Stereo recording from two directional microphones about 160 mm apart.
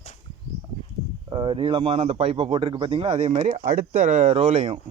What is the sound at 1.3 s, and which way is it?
Speech, 30° right (ahead or behind).